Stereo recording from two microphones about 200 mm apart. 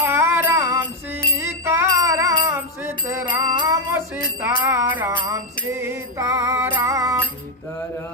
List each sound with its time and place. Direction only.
0.0 s music: 10° right (ahead or behind)
3.9 s music: 10° right (ahead or behind)